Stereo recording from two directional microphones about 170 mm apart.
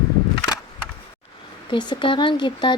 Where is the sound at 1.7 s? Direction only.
25° left (ahead or behind).